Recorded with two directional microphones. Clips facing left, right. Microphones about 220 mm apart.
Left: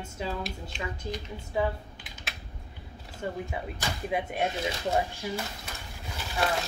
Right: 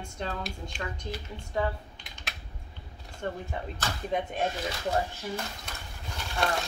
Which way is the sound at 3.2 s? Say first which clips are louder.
Left 1 dB; 5° left (ahead or behind).